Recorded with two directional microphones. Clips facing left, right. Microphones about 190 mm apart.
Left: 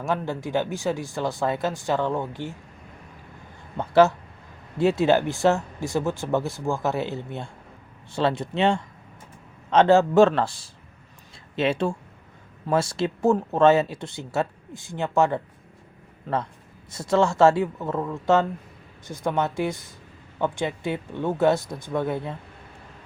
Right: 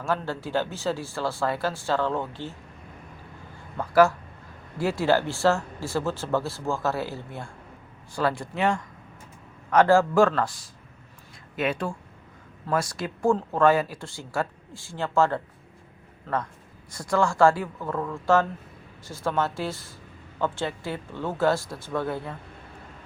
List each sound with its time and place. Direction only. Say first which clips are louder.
0.0 s speech: left 2 dB; 15° left (ahead or behind)
3.8 s a man's voice: left 2 dB; 25° left (ahead or behind)